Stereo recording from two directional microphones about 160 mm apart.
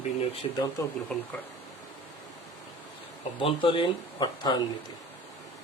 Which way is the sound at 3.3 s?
35° left (ahead or behind).